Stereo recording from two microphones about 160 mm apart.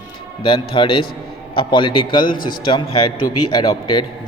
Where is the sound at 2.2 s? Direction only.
60° left (ahead or behind).